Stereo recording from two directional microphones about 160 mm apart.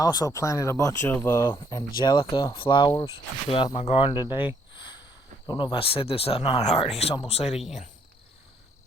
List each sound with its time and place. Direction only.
0.0 s speech: 25° left (ahead or behind)
2.0 s speech: 25° left (ahead or behind)